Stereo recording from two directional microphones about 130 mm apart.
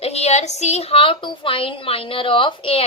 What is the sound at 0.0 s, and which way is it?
A woman's voice, 55° left (ahead or behind).